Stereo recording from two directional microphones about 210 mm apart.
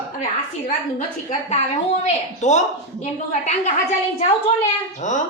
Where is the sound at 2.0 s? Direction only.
35° left (ahead or behind).